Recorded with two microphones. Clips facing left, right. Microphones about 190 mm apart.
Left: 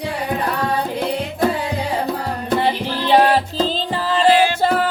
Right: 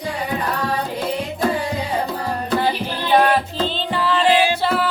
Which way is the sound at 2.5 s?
25° left (ahead or behind).